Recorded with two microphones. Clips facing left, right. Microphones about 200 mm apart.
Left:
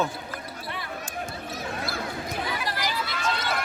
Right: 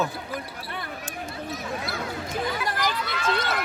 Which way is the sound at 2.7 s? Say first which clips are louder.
Right 2 dB; 50° right (ahead or behind).